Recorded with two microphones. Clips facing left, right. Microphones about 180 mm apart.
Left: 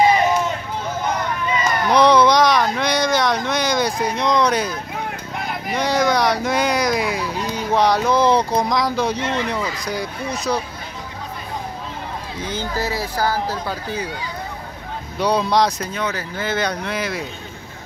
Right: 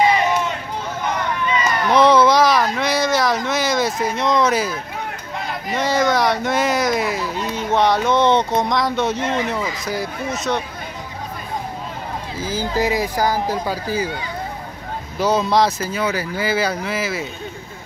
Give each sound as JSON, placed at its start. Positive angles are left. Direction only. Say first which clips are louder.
{"t": 1.6, "sound": "speech", "louder": "even", "side_deg": 0}
{"t": 12.4, "sound": "speech", "louder": "right 3 dB", "side_deg": -5}
{"t": 12.7, "sound": "speech", "louder": "right 5 dB", "side_deg": -15}
{"t": 15.1, "sound": "speech", "louder": "right 1 dB", "side_deg": 0}